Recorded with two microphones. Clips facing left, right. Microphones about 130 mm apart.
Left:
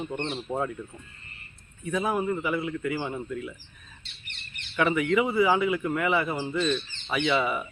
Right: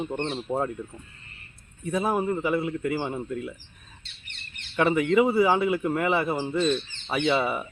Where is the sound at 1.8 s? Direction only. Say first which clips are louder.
Right 2 dB; 35° right (ahead or behind).